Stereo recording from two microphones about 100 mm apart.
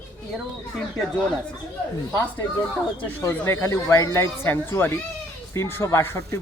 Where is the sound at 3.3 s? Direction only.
25° left (ahead or behind).